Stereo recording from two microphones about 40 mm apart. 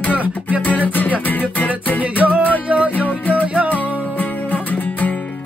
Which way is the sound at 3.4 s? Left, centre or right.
Right.